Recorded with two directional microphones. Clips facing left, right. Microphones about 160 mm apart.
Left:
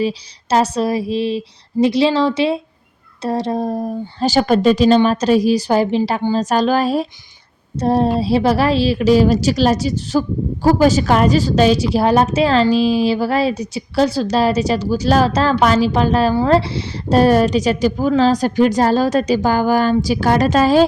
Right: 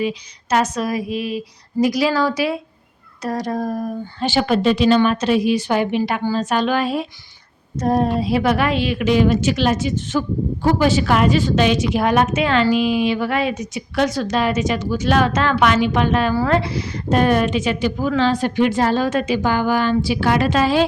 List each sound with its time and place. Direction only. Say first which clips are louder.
0.0 s a woman's voice: left 3 dB; 30° left (ahead or behind)
4.3 s a woman's voice: left 4 dB; 40° left (ahead or behind)